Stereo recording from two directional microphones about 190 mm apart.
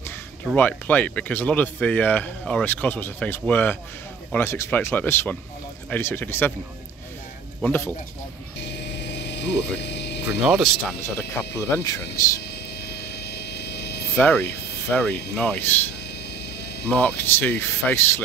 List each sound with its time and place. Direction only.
0.6 s speech: 10° left (ahead or behind)
7.6 s speech: 10° left (ahead or behind)
8.5 s a sound: 65° left (ahead or behind)
10.6 s speech: centre (ahead or behind)
11.1 s speech: 15° left (ahead or behind)
12.4 s hum: 60° left (ahead or behind)
14.1 s speech: 10° left (ahead or behind)
16.9 s speech: 10° left (ahead or behind)